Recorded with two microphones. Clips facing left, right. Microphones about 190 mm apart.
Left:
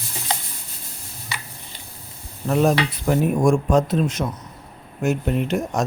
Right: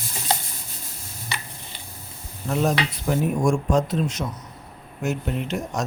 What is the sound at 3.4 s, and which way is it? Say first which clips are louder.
Speech: left 4 dB; 55° left (ahead or behind).